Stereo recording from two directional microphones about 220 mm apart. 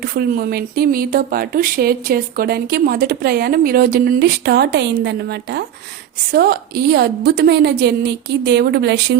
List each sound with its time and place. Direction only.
0.0 s speech: 45° right (ahead or behind)